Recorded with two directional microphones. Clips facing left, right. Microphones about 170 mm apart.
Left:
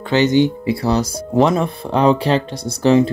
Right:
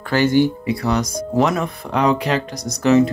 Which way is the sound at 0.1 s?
20° left (ahead or behind).